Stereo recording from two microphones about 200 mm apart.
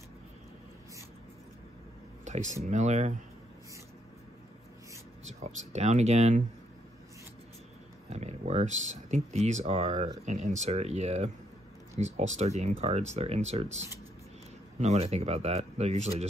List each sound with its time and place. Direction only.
2.2 s a sound: 35° right (ahead or behind)
2.6 s speech: 35° right (ahead or behind)
5.2 s speech: 35° right (ahead or behind)
8.1 s speech: 35° right (ahead or behind)
14.8 s speech: 35° right (ahead or behind)